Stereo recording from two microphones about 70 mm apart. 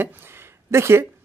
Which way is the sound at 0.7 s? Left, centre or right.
Right.